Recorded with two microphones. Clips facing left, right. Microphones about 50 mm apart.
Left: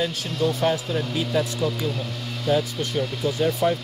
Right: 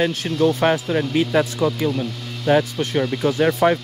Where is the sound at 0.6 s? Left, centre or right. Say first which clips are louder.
Right 5 dB; right.